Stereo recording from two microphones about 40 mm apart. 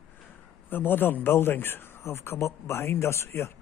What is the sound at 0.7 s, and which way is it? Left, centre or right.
Speech, left.